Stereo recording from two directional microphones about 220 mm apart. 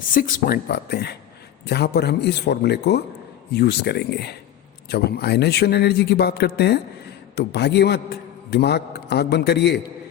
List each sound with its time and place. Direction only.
0.1 s speech: 40° left (ahead or behind)